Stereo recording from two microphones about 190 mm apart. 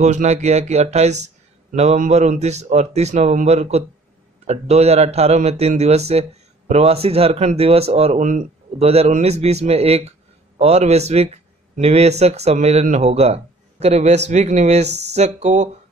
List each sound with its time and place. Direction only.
0.0 s speech: 40° right (ahead or behind)